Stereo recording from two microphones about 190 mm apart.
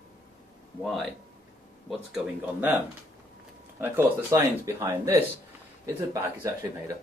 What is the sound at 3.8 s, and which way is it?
Speech, 15° right (ahead or behind).